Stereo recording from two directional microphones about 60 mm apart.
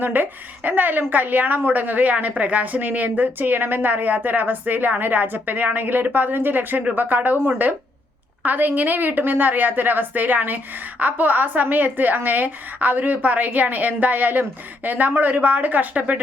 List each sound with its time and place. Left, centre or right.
0.0 s a woman's voice: right